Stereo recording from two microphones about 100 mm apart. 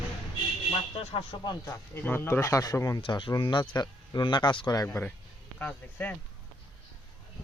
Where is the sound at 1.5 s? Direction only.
35° left (ahead or behind).